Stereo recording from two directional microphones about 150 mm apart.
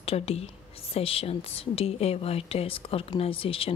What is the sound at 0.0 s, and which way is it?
A woman's voice, 40° left (ahead or behind).